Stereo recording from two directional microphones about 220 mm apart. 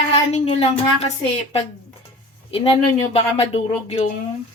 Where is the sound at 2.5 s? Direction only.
25° left (ahead or behind).